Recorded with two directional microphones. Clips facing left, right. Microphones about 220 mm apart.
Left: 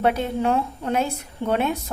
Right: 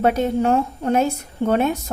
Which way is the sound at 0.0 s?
45° right (ahead or behind).